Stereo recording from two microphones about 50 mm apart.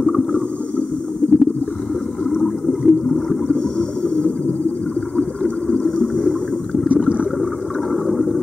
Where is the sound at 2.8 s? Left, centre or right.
Centre.